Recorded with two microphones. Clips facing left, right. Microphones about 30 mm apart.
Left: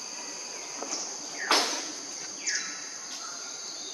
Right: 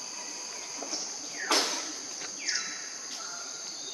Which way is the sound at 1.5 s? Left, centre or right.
Centre.